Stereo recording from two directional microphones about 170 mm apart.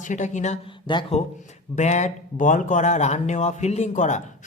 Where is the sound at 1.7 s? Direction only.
45° left (ahead or behind).